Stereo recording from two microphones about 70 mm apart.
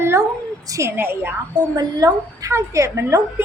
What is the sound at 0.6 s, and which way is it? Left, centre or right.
Speech, right.